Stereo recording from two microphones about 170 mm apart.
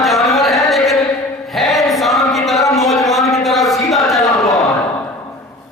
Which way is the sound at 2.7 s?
Centre (ahead or behind).